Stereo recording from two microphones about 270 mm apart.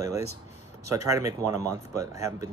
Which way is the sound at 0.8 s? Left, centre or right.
Centre.